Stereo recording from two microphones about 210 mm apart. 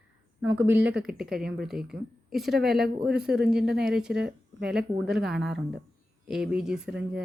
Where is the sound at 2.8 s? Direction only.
50° right (ahead or behind).